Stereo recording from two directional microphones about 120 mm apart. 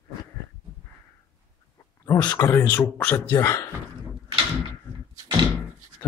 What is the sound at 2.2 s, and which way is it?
Speech, 20° left (ahead or behind).